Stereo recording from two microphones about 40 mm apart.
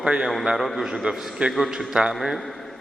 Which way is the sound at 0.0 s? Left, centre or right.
Right.